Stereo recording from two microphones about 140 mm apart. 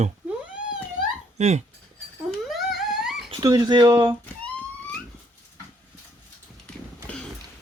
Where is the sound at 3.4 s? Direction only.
30° right (ahead or behind).